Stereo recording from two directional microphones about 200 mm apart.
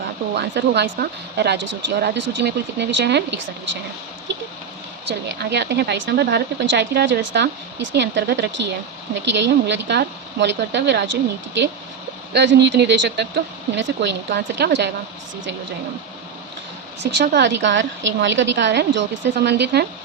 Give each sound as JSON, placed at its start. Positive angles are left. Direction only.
{"t": 0.3, "sound": "speech", "side_deg": -55}
{"t": 5.0, "sound": "speech", "side_deg": -55}
{"t": 17.0, "sound": "speech", "side_deg": -60}